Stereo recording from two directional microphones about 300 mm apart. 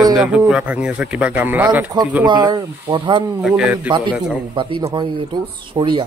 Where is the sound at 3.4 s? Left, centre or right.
Centre.